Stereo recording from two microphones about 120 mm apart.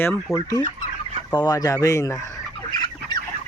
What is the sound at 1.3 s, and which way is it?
Speech, 30° left (ahead or behind).